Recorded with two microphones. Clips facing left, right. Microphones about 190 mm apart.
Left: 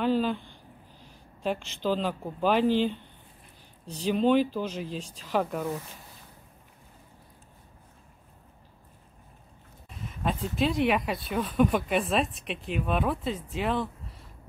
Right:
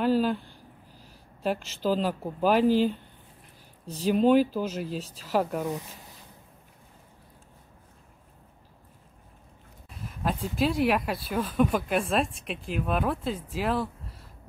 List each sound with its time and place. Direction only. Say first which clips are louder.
0.0 s a sound: right 2 dB; 5° right (ahead or behind)
1.0 s speech: right 1 dB; 5° right (ahead or behind)
5.6 s speech: right 1 dB; 15° right (ahead or behind)
9.8 s speech: even; centre (ahead or behind)